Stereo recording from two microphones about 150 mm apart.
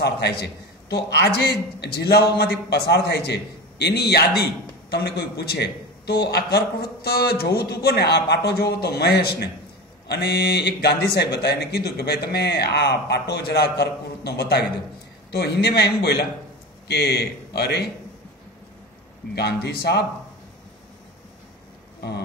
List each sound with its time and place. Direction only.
0.0 s a man's voice: 90° left
19.3 s a man's voice: 90° left